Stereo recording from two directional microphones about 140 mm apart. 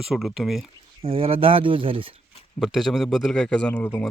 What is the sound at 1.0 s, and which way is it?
Speech, 40° right (ahead or behind).